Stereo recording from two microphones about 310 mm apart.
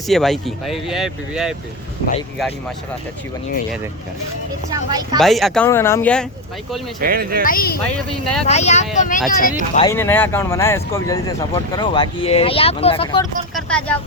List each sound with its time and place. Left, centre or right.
0.1 s speech: centre
4.7 s speech: centre
5.2 s speech: centre
7.0 s speech: right
7.4 s speech: left
8.2 s speech: centre
8.4 s speech: left
9.7 s speech: centre
13.5 s speech: centre